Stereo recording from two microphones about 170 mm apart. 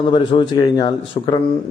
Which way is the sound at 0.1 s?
30° left (ahead or behind).